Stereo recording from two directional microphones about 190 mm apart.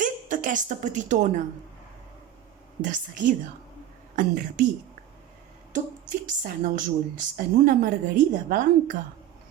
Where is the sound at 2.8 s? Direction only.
45° right (ahead or behind).